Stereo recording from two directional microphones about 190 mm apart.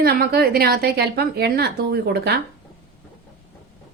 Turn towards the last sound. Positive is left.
turn(degrees=-60)  # may be behind; listen again after turning